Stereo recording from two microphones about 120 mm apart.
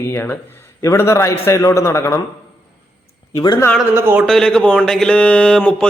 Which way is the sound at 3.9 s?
20° right (ahead or behind).